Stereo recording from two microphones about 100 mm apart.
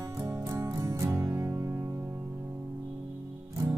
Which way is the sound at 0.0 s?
30° right (ahead or behind).